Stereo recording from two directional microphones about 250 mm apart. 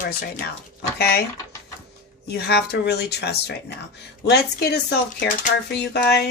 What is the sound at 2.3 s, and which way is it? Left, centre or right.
Speech, left.